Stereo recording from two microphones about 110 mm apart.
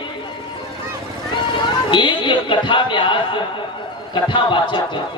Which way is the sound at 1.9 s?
50° left (ahead or behind).